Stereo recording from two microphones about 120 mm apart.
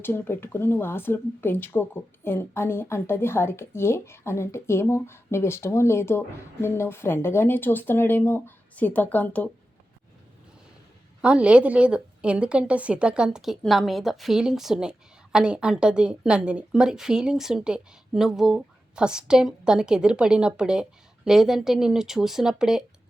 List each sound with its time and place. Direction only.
0.0 s speech: 20° left (ahead or behind)
11.2 s a woman's voice: 10° right (ahead or behind)